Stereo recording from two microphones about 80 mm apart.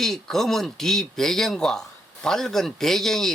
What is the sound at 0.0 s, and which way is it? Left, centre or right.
Speech, centre.